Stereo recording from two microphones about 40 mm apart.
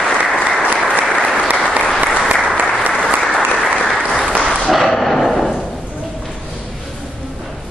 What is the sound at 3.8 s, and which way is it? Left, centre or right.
Applause, centre.